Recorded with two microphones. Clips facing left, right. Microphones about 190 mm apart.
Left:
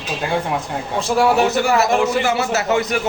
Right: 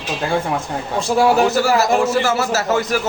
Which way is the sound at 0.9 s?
Centre (ahead or behind).